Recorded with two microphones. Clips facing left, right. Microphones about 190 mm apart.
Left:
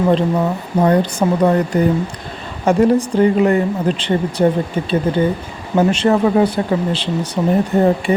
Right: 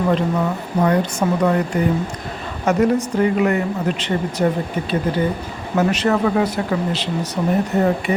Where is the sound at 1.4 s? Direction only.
35° left (ahead or behind).